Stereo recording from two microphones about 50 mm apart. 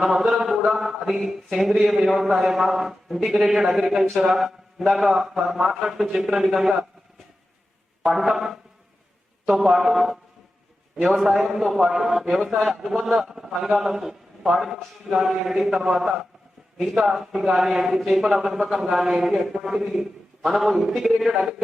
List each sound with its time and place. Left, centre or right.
0.0 s a man's voice: centre
8.0 s a man's voice: centre